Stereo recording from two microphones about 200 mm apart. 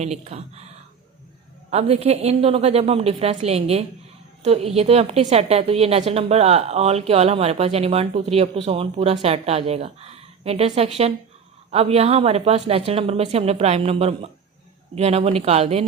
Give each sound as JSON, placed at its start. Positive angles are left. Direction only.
{"t": 0.0, "sound": "a woman's voice", "side_deg": -35}
{"t": 1.7, "sound": "a woman's voice", "side_deg": -30}